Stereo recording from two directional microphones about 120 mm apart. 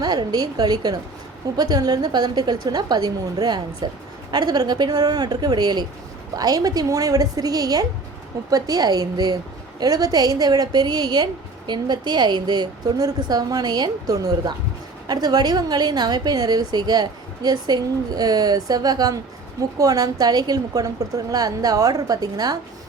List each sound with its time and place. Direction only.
0.0 s a woman's voice: 35° right (ahead or behind)